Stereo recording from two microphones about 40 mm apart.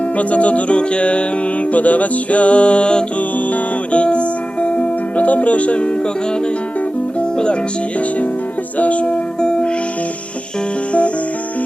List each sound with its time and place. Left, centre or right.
0.2 s music: left
1.7 s music: left
7.2 s music: left
8.8 s music: left
9.4 s music: left